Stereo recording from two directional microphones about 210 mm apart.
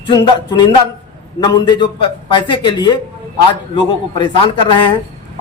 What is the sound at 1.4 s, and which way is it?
A man's voice, 20° left (ahead or behind).